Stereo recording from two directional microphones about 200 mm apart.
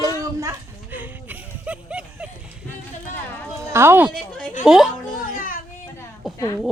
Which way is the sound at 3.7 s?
10° right (ahead or behind).